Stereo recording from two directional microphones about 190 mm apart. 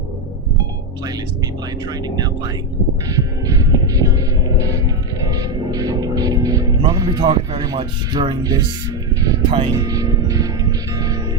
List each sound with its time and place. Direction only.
1.9 s speech: 20° right (ahead or behind)
3.1 s music: 20° right (ahead or behind)
5.3 s music: 20° right (ahead or behind)